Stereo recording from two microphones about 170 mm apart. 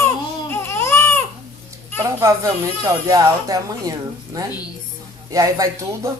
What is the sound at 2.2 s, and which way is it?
Speech, 20° right (ahead or behind).